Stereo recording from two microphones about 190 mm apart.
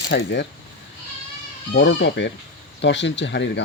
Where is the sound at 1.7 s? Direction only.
65° left (ahead or behind).